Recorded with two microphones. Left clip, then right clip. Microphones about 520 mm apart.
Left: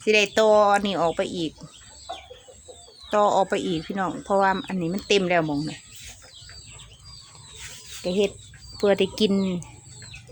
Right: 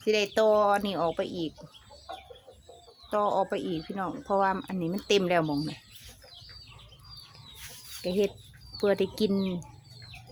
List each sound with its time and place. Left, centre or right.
0.0 s speech: right
3.1 s speech: right
8.0 s speech: right